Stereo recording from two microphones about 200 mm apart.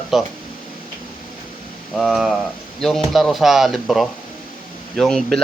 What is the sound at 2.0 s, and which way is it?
Speech, centre (ahead or behind).